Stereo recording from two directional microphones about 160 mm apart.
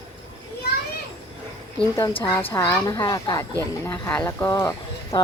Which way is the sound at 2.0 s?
35° left (ahead or behind).